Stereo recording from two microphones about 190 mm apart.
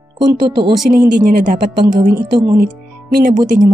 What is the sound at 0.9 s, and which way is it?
Speech, 50° right (ahead or behind).